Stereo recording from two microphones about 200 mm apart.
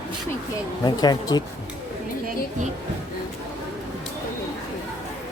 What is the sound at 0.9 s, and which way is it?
Speech, 20° left (ahead or behind).